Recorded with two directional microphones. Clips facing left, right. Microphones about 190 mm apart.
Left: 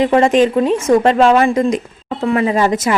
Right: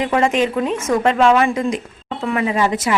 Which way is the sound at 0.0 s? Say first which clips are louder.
Left 6 dB; 35° left (ahead or behind).